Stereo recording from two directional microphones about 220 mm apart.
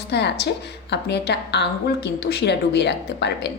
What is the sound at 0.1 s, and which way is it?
A woman's voice, 50° left (ahead or behind).